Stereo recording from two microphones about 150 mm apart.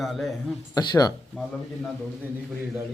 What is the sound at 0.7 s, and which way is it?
Speech, 25° left (ahead or behind).